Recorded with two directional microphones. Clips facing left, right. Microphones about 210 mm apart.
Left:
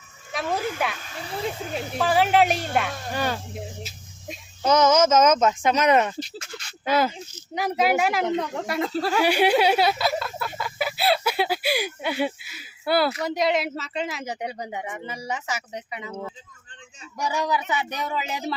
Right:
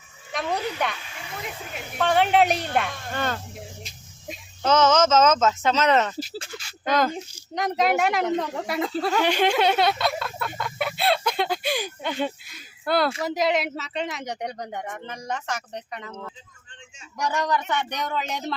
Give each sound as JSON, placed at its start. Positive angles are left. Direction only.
{"t": 0.3, "sound": "a sound", "side_deg": 0}
{"t": 0.9, "sound": "speech", "side_deg": 40}
{"t": 2.0, "sound": "speech", "side_deg": 5}
{"t": 6.1, "sound": "speech", "side_deg": -5}
{"t": 6.8, "sound": "speech", "side_deg": 5}